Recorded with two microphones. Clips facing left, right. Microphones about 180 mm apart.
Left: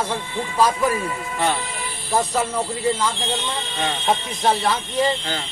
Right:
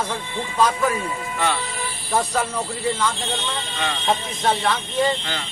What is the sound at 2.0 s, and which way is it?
Speech, 5° left (ahead or behind).